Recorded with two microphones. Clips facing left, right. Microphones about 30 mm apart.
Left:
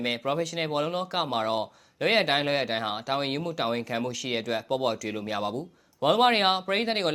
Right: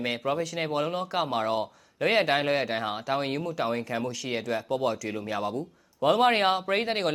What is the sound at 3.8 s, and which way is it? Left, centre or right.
Speech, left.